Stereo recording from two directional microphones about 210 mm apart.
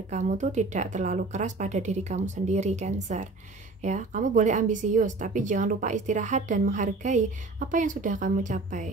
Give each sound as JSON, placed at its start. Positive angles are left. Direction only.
{"t": 0.1, "sound": "speech", "side_deg": -35}